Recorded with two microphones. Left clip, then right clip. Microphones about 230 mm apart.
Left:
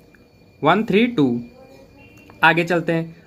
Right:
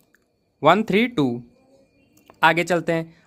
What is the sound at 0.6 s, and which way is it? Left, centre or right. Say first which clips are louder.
Speech: even; right.